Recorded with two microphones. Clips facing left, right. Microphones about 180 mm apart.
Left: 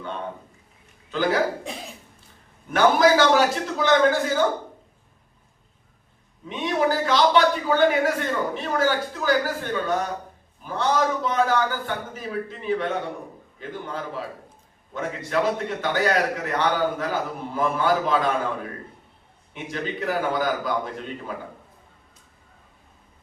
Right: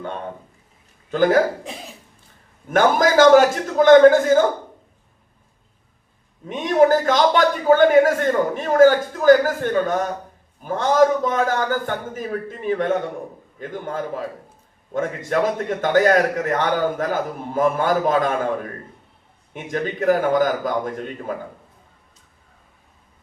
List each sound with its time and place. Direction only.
1.1 s a man's voice: 50° right (ahead or behind)
2.6 s a man's voice: 45° right (ahead or behind)
6.5 s a man's voice: 50° right (ahead or behind)
19.7 s a man's voice: 50° right (ahead or behind)